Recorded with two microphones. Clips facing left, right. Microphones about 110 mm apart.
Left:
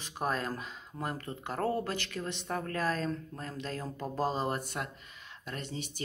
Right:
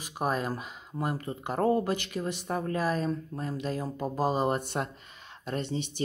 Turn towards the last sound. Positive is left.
turn(degrees=-25)  # may be behind; listen again after turning